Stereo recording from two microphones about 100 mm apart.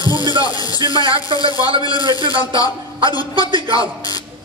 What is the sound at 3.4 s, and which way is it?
Speech, 55° right (ahead or behind).